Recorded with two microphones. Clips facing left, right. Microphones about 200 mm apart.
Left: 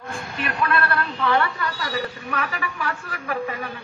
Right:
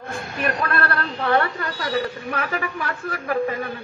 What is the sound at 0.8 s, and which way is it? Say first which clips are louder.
A woman's voice: even; 55° right (ahead or behind).